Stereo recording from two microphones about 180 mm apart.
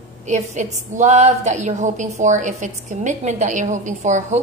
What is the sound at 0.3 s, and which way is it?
A woman's voice, 40° right (ahead or behind).